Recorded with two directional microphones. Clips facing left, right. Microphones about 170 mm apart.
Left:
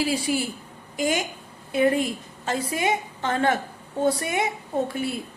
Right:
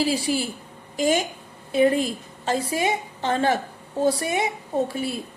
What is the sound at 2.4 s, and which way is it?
A woman's voice, 30° right (ahead or behind).